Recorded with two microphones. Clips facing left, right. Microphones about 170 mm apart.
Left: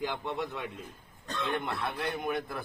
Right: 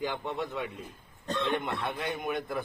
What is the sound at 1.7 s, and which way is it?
Speech, centre (ahead or behind).